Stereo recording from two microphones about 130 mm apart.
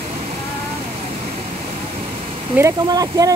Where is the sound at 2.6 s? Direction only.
25° right (ahead or behind).